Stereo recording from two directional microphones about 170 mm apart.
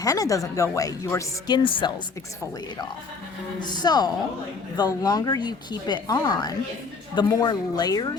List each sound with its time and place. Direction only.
0.0 s speech: 20° left (ahead or behind)
3.8 s speech: 25° left (ahead or behind)